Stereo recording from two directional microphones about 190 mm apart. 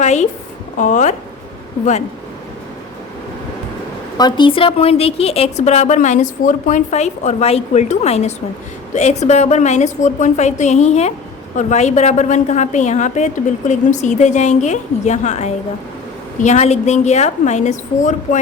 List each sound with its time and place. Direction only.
0.0 s a woman's voice: 40° left (ahead or behind)
4.2 s a woman's voice: 25° left (ahead or behind); by 18.3 s 40° left (ahead or behind)